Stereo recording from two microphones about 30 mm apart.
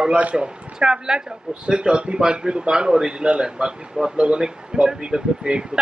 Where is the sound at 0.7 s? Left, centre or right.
Right.